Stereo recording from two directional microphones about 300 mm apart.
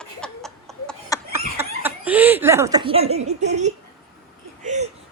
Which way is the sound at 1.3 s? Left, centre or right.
Centre.